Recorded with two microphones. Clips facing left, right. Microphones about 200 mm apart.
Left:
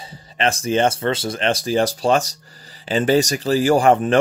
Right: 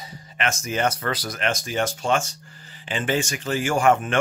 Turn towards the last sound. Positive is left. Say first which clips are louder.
# left 5 dB
turn(degrees=35)  # may be behind; listen again after turning